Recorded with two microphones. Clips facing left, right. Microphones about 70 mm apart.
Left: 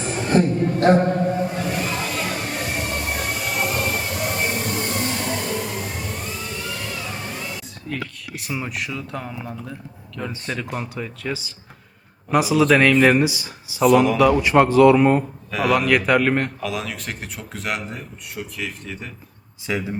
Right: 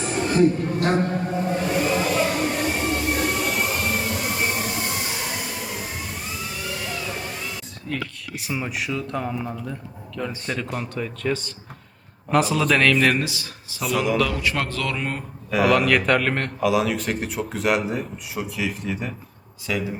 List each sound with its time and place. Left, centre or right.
0.8 s a man's voice: left
1.3 s music: centre
10.2 s a man's voice: centre
13.8 s a man's voice: centre
14.2 s speech: centre
15.4 s a man's voice: centre
19.7 s a man's voice: left